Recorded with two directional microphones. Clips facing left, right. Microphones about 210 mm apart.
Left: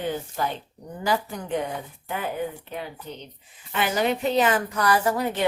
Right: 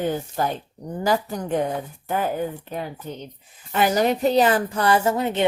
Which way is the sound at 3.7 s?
40° right (ahead or behind).